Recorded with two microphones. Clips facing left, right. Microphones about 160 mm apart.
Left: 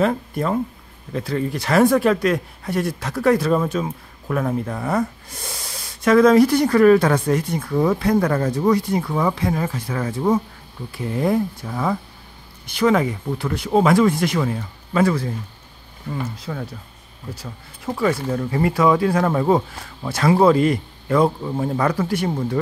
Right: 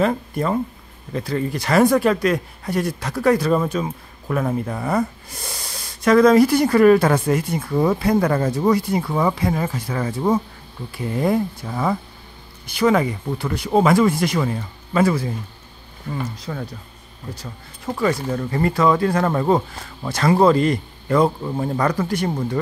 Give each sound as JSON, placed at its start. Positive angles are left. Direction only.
{"t": 0.0, "sound": "speech", "side_deg": 0}
{"t": 16.1, "sound": "speech", "side_deg": 5}